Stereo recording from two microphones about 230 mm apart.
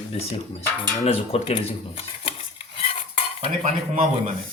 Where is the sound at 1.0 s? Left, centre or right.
Left.